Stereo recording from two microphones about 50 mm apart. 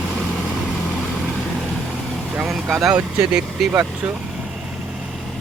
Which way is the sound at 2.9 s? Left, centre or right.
Centre.